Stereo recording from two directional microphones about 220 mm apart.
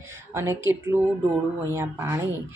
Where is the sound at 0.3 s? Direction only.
10° right (ahead or behind).